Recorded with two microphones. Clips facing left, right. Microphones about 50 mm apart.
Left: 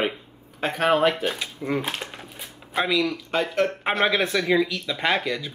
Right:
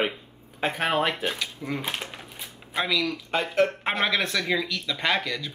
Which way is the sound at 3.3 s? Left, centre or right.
Centre.